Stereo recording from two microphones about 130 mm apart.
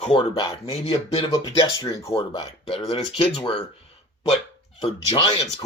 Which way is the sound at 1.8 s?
25° left (ahead or behind).